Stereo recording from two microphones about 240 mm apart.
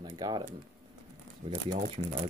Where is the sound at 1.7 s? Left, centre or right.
Right.